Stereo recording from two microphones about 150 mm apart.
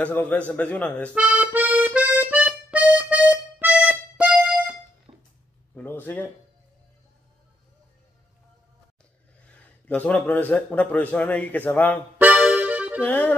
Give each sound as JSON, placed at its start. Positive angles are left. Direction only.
{"t": 0.0, "sound": "a man's voice", "side_deg": 10}
{"t": 1.1, "sound": "accordion", "side_deg": -10}
{"t": 5.1, "sound": "a sound", "side_deg": -30}
{"t": 5.8, "sound": "speech", "side_deg": 15}
{"t": 9.6, "sound": "a man's voice", "side_deg": 10}
{"t": 12.2, "sound": "music", "side_deg": -10}
{"t": 13.0, "sound": "a man's voice", "side_deg": 10}